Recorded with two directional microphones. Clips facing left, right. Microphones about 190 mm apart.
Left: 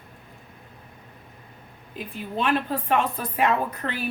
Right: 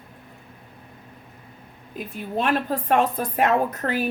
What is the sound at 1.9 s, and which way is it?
Speech, 45° right (ahead or behind).